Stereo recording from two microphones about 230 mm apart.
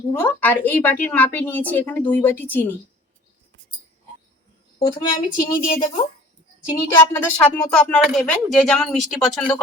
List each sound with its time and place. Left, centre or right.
0.1 s a woman's voice: centre
4.8 s a woman's voice: centre